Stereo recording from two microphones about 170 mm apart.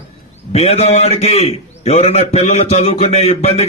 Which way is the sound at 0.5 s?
35° left (ahead or behind).